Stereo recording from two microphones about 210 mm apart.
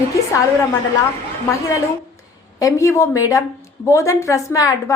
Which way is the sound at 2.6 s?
15° left (ahead or behind).